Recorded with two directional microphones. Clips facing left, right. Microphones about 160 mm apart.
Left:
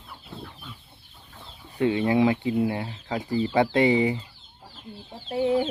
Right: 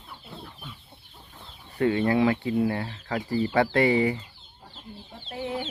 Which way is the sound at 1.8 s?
15° left (ahead or behind).